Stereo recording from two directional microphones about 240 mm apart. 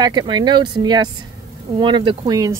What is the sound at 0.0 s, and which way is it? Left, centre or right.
Speech, centre.